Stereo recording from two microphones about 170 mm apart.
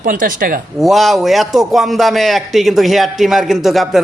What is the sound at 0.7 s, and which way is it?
A man's voice, centre (ahead or behind).